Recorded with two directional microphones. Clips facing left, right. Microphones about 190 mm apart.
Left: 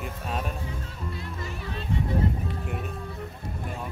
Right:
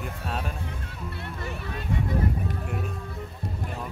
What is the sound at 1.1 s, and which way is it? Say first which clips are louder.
Speech: right 1 dB; 65° right (ahead or behind).